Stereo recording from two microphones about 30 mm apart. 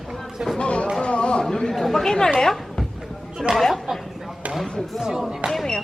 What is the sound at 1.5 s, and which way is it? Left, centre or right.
Speech, left.